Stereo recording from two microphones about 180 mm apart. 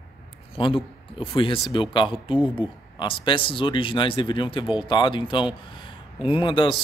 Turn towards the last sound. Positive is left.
turn(degrees=25)  # may be behind; listen again after turning